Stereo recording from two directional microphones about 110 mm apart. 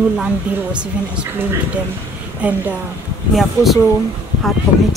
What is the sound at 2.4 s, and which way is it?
Speech, 10° right (ahead or behind).